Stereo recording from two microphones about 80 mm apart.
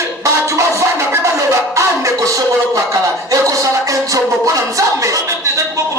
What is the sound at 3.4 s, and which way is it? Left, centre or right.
Music, right.